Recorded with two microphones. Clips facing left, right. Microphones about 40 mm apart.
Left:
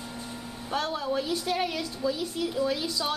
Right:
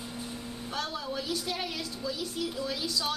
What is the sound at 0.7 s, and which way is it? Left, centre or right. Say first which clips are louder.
A woman's voice: left 6 dB; centre.